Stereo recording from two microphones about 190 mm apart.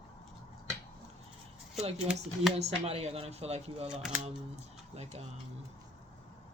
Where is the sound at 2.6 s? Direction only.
35° right (ahead or behind).